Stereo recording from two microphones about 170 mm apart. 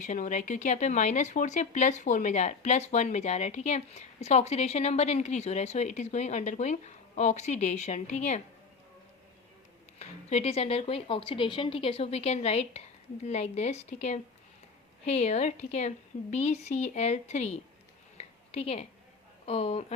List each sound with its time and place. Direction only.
0.0 s speech: 45° left (ahead or behind)
10.0 s speech: 40° left (ahead or behind)
18.2 s a sound: 35° left (ahead or behind)
19.5 s speech: 35° left (ahead or behind)